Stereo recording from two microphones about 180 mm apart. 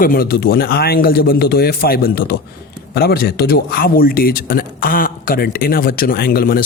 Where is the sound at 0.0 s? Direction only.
55° left (ahead or behind).